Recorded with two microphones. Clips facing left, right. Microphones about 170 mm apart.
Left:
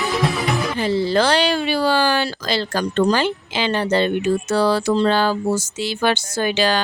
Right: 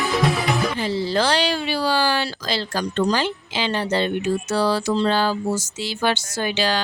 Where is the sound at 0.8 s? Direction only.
55° left (ahead or behind).